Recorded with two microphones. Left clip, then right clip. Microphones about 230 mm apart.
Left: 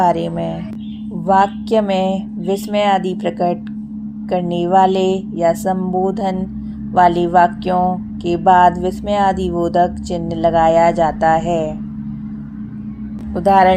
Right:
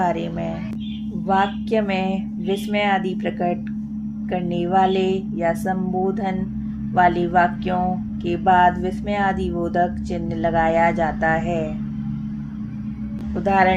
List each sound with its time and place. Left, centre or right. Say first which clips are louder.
0.0 s speech: left 7 dB; left
1.3 s music: left 6 dB; left
13.3 s speech: left 6 dB; left